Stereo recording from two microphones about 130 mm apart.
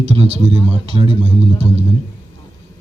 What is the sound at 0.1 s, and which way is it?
Speech, 50° right (ahead or behind).